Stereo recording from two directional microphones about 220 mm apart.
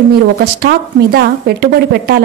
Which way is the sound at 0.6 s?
45° right (ahead or behind).